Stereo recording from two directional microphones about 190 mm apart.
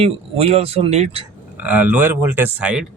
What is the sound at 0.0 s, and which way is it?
Speech, 30° right (ahead or behind).